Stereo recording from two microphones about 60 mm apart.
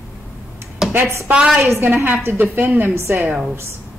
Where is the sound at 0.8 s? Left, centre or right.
Centre.